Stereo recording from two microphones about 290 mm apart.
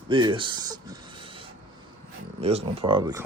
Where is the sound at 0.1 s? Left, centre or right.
Centre.